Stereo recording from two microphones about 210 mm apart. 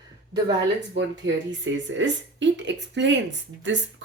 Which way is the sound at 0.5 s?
60° right (ahead or behind).